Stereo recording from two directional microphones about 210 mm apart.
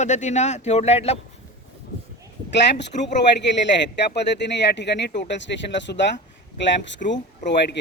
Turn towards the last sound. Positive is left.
turn(degrees=55)  # may be behind; listen again after turning